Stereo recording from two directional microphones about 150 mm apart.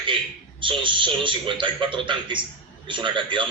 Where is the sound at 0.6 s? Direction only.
35° right (ahead or behind).